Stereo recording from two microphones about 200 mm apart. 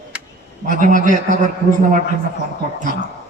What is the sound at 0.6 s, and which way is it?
Speech, 40° right (ahead or behind).